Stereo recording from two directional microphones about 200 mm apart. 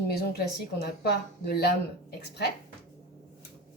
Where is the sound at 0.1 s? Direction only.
55° left (ahead or behind).